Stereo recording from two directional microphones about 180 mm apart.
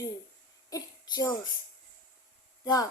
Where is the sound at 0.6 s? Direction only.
20° left (ahead or behind).